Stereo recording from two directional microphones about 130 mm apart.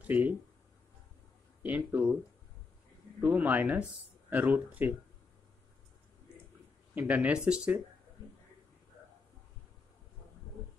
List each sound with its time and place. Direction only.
0.0 s speech: 15° right (ahead or behind)
1.6 s speech: 10° right (ahead or behind)
3.2 s speech: 10° right (ahead or behind)
7.0 s speech: 10° right (ahead or behind)